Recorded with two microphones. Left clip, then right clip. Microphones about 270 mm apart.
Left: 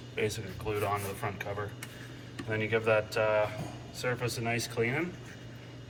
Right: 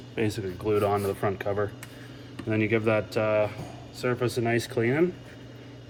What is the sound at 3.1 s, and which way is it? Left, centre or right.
Speech, right.